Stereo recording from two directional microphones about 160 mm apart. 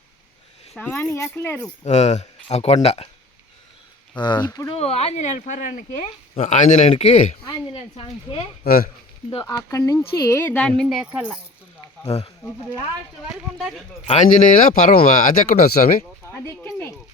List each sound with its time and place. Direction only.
0.7 s speech: 10° left (ahead or behind)
1.8 s speech: 45° left (ahead or behind)
4.2 s speech: 30° left (ahead or behind)
4.7 s speech: 40° left (ahead or behind)
8.6 s speech: 70° left (ahead or behind)
9.4 s speech: 20° left (ahead or behind); by 11.3 s 10° right (ahead or behind)
12.0 s speech: 40° left (ahead or behind)
13.3 s speech: centre (ahead or behind)
14.1 s speech: 50° left (ahead or behind); by 16.0 s 65° left (ahead or behind)
16.5 s a sound: 15° left (ahead or behind)